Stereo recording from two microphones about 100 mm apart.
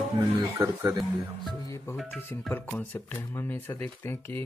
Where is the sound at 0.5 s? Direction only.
30° right (ahead or behind).